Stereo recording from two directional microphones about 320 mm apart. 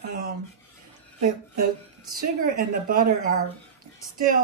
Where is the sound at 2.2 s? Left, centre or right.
Right.